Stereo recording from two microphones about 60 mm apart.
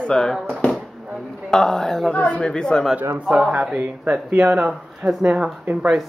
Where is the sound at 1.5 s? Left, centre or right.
Centre.